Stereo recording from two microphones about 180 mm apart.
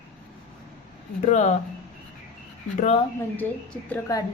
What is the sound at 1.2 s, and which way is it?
Speech, 40° left (ahead or behind).